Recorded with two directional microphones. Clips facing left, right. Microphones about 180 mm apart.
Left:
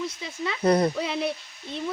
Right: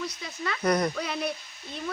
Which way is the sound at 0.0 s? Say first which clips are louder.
Left 3 dB; 25° left (ahead or behind).